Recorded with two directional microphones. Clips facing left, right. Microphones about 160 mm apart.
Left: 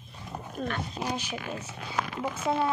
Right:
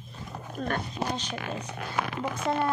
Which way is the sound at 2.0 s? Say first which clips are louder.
Right 1 dB; 5° right (ahead or behind).